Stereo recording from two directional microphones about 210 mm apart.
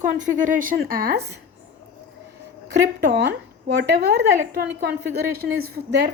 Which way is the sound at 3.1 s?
55° right (ahead or behind).